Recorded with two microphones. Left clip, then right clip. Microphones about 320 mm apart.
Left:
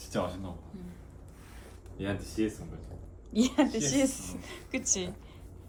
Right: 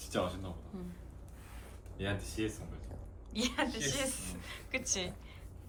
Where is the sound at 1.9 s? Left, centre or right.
Left.